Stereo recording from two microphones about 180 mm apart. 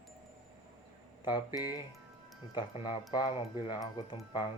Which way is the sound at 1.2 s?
25° left (ahead or behind).